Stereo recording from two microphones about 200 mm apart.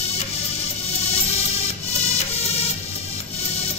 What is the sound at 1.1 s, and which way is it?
Music, 30° left (ahead or behind).